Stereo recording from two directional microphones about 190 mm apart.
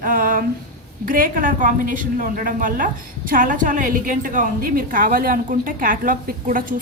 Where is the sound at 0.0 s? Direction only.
45° right (ahead or behind).